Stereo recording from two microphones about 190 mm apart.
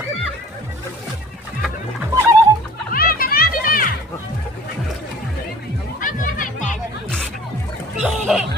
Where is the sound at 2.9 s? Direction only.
50° left (ahead or behind).